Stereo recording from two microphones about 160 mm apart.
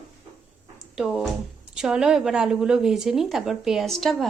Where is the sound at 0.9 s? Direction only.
5° right (ahead or behind).